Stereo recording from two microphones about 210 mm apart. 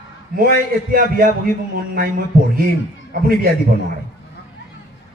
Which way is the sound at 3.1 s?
45° right (ahead or behind).